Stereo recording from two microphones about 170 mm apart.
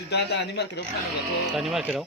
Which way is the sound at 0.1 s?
80° left.